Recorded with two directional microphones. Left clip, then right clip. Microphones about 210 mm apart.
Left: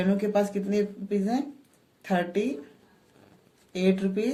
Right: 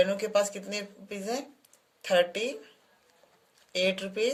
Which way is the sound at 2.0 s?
45° right (ahead or behind).